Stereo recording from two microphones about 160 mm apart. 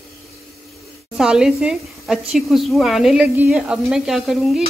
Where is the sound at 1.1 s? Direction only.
5° right (ahead or behind).